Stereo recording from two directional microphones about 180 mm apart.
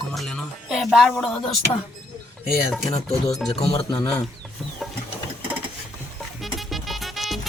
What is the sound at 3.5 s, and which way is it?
Speech, 30° left (ahead or behind).